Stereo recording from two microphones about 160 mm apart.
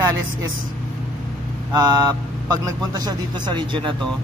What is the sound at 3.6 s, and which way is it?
Speech, 30° right (ahead or behind).